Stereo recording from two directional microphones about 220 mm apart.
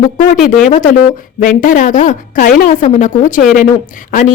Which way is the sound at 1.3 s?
40° left (ahead or behind).